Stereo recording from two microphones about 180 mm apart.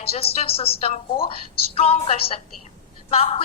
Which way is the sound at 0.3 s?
30° left (ahead or behind).